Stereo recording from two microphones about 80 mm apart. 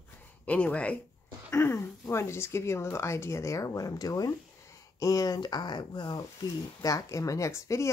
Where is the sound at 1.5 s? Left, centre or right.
Left.